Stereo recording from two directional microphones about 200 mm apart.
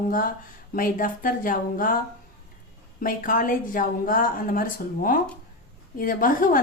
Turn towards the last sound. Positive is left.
turn(degrees=45)  # may be behind; listen again after turning